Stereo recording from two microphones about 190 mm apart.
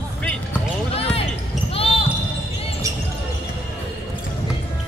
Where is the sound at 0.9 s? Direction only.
30° left (ahead or behind).